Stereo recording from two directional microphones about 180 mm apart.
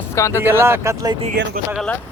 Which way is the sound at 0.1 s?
15° left (ahead or behind).